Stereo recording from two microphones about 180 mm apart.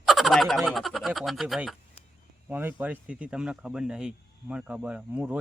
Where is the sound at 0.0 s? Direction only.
Centre (ahead or behind).